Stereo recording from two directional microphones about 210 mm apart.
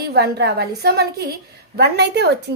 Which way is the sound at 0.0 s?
50° right (ahead or behind).